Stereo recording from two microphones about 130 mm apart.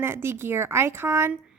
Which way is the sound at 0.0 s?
20° right (ahead or behind).